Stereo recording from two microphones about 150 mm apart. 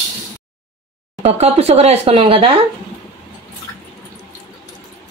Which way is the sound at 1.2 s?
45° right (ahead or behind).